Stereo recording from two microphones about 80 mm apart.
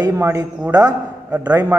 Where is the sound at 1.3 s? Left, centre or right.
Centre.